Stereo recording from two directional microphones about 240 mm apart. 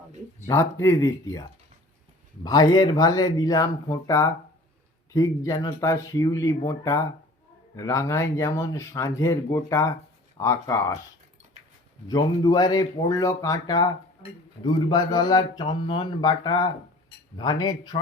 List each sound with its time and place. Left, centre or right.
0.4 s speech: centre
12.0 s speech: centre